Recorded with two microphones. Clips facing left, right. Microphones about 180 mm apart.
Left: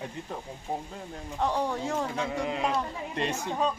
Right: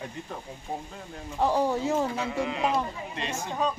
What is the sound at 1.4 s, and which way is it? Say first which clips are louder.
A man's voice: right 4 dB; 5° right (ahead or behind).